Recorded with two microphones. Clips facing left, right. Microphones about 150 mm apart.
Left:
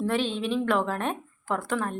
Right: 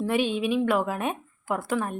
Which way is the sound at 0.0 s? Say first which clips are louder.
Right 2 dB; 10° right (ahead or behind).